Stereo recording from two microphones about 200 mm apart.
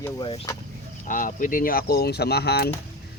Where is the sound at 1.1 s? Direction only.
40° left (ahead or behind).